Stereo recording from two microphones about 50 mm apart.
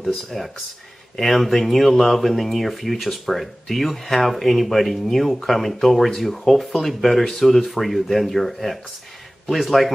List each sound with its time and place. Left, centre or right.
0.0 s speech: centre